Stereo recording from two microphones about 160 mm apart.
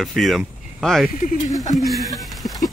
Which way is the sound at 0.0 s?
Centre (ahead or behind).